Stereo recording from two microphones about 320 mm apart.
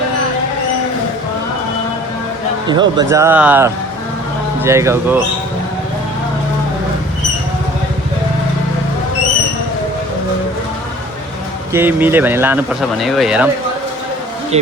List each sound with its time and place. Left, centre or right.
2.6 s speech: centre
11.7 s speech: centre
14.5 s speech: centre